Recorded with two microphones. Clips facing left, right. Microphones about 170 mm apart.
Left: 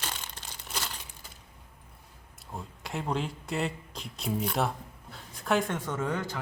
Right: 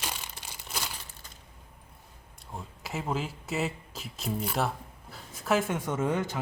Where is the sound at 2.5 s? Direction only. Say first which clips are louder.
Even; centre (ahead or behind).